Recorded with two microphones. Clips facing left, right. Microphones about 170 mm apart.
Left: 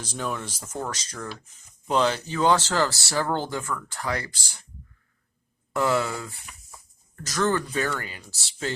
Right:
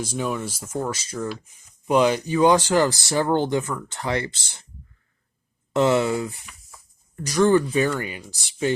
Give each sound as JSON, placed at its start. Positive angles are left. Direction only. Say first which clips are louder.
{"t": 0.0, "sound": "speech", "louder": "right 5 dB", "side_deg": -10}
{"t": 5.7, "sound": "speech", "louder": "right 5 dB", "side_deg": -20}